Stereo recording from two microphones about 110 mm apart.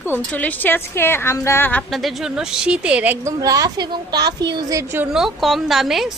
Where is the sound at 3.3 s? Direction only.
35° right (ahead or behind).